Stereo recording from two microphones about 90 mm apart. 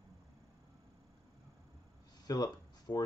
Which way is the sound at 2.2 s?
45° left (ahead or behind).